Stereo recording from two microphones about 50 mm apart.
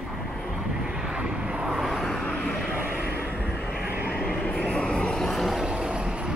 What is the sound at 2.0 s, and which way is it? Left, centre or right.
Vehicle, centre.